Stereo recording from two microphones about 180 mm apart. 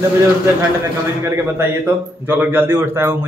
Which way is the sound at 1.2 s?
15° right (ahead or behind).